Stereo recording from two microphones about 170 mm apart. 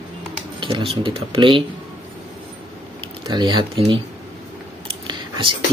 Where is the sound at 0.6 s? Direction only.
35° right (ahead or behind).